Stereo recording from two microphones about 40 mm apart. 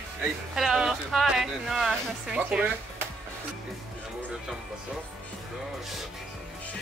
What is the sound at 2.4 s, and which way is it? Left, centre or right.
Speech, right.